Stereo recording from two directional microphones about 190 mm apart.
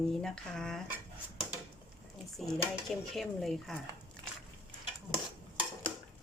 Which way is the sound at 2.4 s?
Centre (ahead or behind).